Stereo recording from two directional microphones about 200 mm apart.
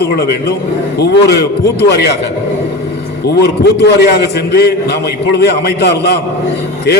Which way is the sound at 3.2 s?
55° left (ahead or behind).